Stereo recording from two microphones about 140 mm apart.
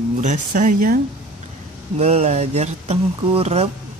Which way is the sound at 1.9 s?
50° right (ahead or behind).